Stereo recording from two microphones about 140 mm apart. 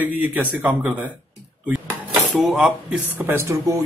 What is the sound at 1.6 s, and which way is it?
Speech, centre (ahead or behind).